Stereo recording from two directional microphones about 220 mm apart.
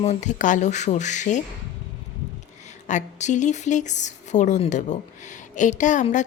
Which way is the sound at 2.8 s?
35° left (ahead or behind).